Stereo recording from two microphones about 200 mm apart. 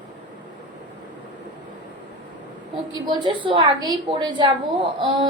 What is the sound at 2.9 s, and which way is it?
A woman's voice, 20° right (ahead or behind).